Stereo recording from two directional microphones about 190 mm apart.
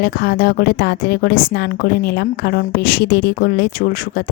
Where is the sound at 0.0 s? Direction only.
55° left (ahead or behind).